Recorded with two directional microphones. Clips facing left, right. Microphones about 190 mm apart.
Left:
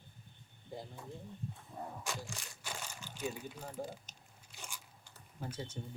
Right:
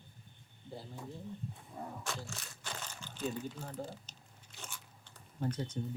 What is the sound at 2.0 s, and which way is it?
Crumpling, 10° left (ahead or behind).